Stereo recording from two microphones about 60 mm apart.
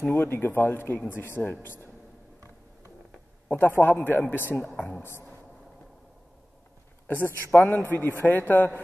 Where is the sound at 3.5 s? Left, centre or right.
Left.